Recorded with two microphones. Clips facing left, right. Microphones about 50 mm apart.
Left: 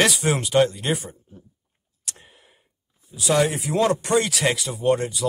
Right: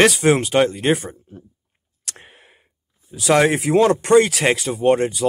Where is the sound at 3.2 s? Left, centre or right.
Right.